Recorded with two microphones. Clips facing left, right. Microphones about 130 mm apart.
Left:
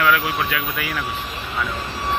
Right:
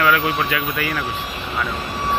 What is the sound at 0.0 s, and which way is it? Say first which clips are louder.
Speech: right 1 dB; centre (ahead or behind).